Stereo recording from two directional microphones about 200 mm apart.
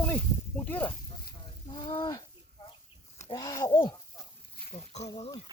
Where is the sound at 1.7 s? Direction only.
25° left (ahead or behind).